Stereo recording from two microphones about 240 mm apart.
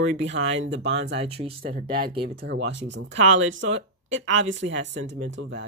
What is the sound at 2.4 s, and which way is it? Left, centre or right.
Speech, right.